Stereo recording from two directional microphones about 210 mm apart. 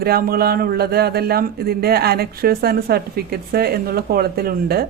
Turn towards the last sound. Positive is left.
turn(degrees=-45)  # may be behind; listen again after turning